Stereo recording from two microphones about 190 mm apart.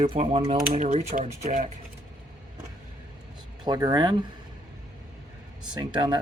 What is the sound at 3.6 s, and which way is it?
Speech, 20° right (ahead or behind).